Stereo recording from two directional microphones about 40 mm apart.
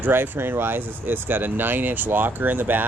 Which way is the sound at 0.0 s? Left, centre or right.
Right.